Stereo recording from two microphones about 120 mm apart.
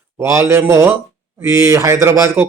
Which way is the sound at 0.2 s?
20° right (ahead or behind).